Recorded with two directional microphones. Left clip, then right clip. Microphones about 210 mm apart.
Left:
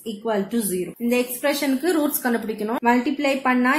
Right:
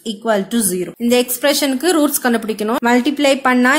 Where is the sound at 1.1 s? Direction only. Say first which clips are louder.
Right 7 dB; 45° right (ahead or behind).